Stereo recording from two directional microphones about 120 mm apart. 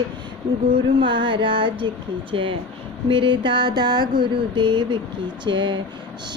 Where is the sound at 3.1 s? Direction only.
40° right (ahead or behind).